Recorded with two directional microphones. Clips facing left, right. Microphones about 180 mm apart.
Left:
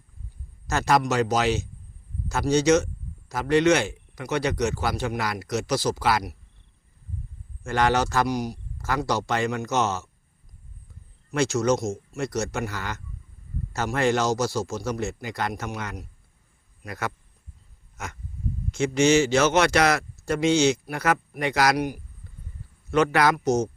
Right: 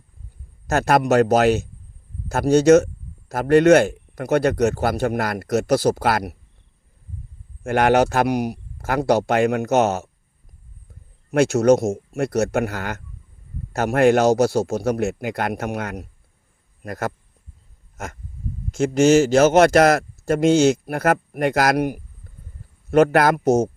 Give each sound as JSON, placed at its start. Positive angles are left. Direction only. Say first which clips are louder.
{"t": 0.7, "sound": "speech", "louder": "right 5 dB", "side_deg": -55}
{"t": 7.6, "sound": "speech", "louder": "right 6 dB", "side_deg": -55}
{"t": 11.3, "sound": "speech", "louder": "right 7 dB", "side_deg": -60}
{"t": 16.8, "sound": "a man's voice", "louder": "right 5 dB", "side_deg": -45}
{"t": 17.9, "sound": "a sound", "louder": "right 4 dB", "side_deg": -45}
{"t": 18.7, "sound": "a man's voice", "louder": "right 5 dB", "side_deg": -45}